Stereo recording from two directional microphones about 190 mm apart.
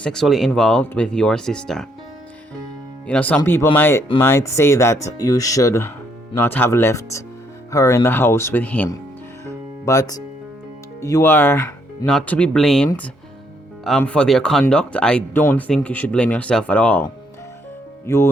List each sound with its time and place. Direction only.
0.0 s speech: 5° left (ahead or behind)
3.1 s speech: 5° left (ahead or behind)
9.5 s music: 15° left (ahead or behind)
11.0 s speech: 15° left (ahead or behind)